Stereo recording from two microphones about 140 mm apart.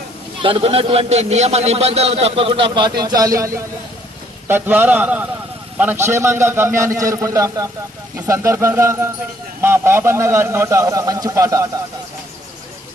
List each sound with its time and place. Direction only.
0.4 s a man's voice: 40° right (ahead or behind); by 11.7 s 20° right (ahead or behind)